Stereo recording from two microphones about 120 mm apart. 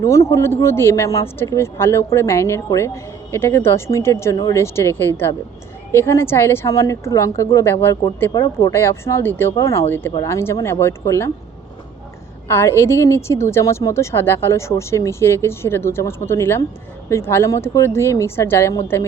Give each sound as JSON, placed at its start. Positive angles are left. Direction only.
{"t": 0.0, "sound": "a woman's voice", "side_deg": 25}
{"t": 12.5, "sound": "a woman's voice", "side_deg": 20}